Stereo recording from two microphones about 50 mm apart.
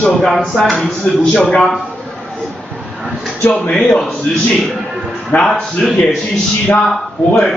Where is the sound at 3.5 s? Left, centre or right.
Centre.